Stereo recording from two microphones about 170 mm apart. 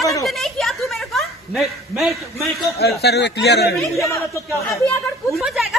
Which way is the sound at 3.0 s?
75° left (ahead or behind).